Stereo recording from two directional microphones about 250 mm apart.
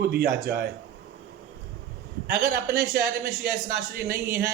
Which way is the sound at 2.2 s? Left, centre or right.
Right.